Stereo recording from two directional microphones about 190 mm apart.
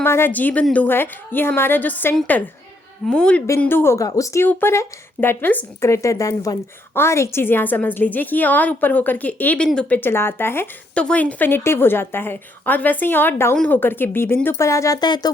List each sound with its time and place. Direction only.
0.0 s speech: 10° left (ahead or behind)